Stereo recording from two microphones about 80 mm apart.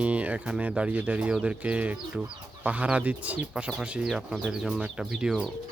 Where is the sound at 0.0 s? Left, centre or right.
Centre.